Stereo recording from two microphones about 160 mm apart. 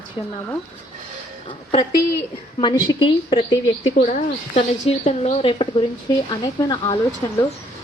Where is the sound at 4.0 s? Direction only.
50° left (ahead or behind); by 7.0 s 25° left (ahead or behind).